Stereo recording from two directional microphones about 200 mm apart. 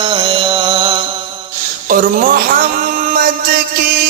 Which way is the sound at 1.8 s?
45° right (ahead or behind).